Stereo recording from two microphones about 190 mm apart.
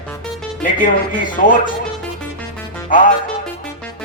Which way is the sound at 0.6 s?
45° left (ahead or behind).